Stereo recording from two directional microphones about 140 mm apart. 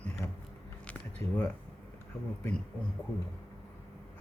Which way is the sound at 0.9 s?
10° left (ahead or behind).